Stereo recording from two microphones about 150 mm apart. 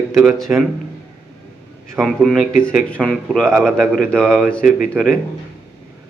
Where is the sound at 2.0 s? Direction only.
Centre (ahead or behind).